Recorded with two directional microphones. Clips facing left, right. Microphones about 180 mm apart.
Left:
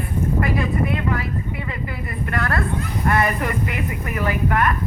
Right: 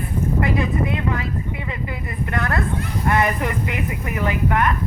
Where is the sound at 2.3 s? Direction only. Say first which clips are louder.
Even; 20° right (ahead or behind).